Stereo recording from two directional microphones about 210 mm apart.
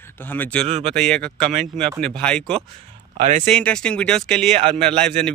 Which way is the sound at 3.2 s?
35° right (ahead or behind).